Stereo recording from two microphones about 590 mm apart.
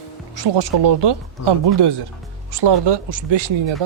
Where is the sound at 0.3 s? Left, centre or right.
Right.